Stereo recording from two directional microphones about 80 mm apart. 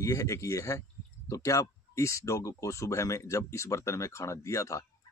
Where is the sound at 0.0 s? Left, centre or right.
Left.